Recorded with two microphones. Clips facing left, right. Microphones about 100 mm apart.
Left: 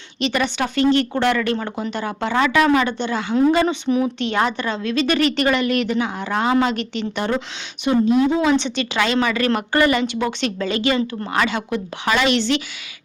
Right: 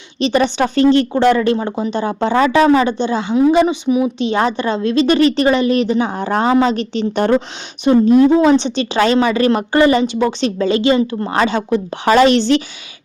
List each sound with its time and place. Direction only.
0.2 s a woman's voice: 25° right (ahead or behind); by 8.4 s 45° right (ahead or behind)
8.4 s a woman's voice: 30° right (ahead or behind)